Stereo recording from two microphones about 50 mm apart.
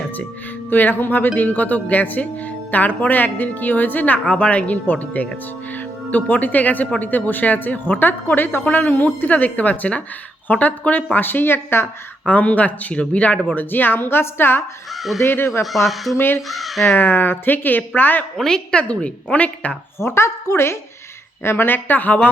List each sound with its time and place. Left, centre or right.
0.7 s speech: left
12.2 s speech: left
13.5 s speech: left
15.6 s speech: centre
16.1 s speech: left
16.5 s speech: centre
17.0 s speech: left
18.3 s a woman's voice: centre
18.8 s speech: left
20.0 s a woman's voice: left
21.4 s speech: left